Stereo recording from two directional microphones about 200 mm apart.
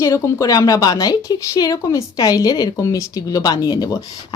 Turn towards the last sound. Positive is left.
turn(degrees=20)  # may be behind; listen again after turning